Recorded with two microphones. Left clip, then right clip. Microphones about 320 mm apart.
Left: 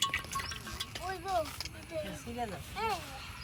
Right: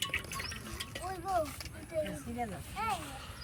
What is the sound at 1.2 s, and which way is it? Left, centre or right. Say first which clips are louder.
Mechanisms: right 1 dB; left.